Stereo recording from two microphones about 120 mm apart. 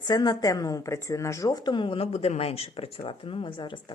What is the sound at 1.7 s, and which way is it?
Speech, 45° left (ahead or behind).